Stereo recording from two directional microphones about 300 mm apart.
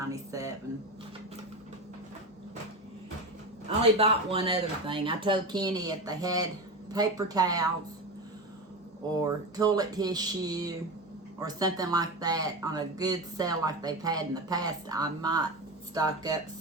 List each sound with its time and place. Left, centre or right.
0.1 s a sound: centre
3.9 s speech: centre
9.2 s speech: centre